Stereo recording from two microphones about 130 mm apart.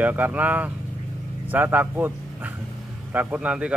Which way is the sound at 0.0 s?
10° right (ahead or behind).